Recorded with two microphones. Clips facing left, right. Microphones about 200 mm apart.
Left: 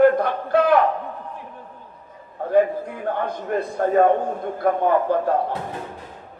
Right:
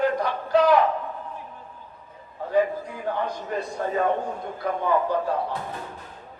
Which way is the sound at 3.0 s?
55° left (ahead or behind).